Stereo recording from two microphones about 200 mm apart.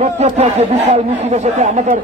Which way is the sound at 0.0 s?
35° right (ahead or behind).